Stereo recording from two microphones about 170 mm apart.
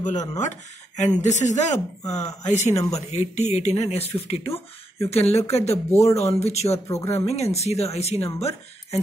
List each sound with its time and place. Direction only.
0.0 s speech: 45° left (ahead or behind)
6.9 s speech: 15° left (ahead or behind)
7.2 s speech: 40° left (ahead or behind)